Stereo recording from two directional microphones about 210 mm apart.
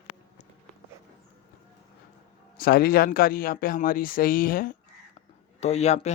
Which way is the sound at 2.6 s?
45° left (ahead or behind).